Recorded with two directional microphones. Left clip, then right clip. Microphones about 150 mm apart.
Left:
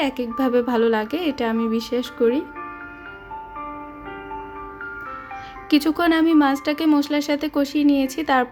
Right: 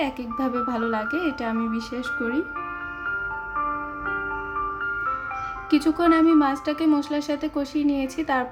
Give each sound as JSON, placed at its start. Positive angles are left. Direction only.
{"t": 0.0, "sound": "speech", "side_deg": 40}
{"t": 3.6, "sound": "music", "side_deg": -25}
{"t": 5.7, "sound": "speech", "side_deg": 40}